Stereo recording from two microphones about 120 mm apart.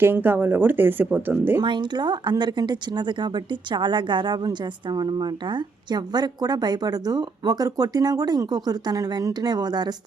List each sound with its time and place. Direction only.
0.0 s speech: 15° right (ahead or behind)
1.6 s speech: 40° right (ahead or behind)